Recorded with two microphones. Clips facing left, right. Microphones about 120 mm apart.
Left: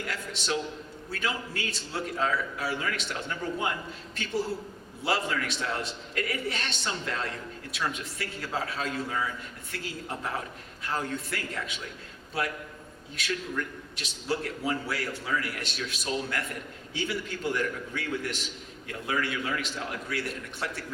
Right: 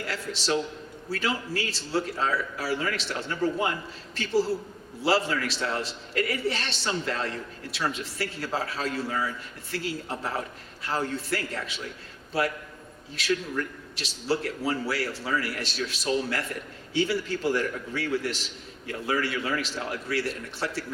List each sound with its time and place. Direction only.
0.1 s a man's voice: 30° right (ahead or behind)
13.1 s a man's voice: 30° right (ahead or behind)